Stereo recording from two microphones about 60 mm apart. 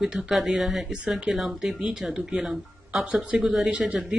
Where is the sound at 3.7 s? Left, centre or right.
Right.